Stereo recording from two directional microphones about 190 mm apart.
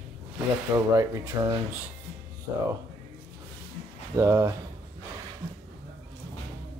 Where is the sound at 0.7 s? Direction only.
15° right (ahead or behind).